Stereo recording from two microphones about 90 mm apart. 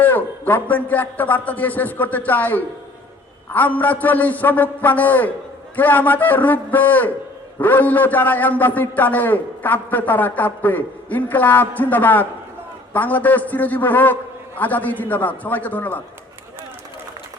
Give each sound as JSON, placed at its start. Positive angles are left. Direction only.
{"t": 0.0, "sound": "a man's voice", "side_deg": 20}